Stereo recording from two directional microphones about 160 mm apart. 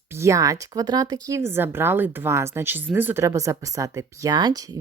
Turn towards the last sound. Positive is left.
turn(degrees=-25)  # may be behind; listen again after turning